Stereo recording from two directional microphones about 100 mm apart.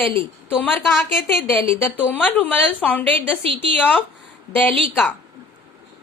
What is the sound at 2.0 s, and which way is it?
A woman's voice, 15° left (ahead or behind).